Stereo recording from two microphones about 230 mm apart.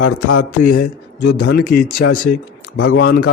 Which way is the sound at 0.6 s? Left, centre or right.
Left.